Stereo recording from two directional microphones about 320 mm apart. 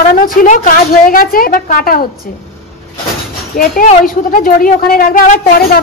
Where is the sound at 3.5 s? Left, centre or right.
Left.